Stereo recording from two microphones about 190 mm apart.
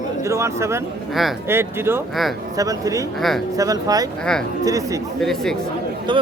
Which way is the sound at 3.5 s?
20° right (ahead or behind).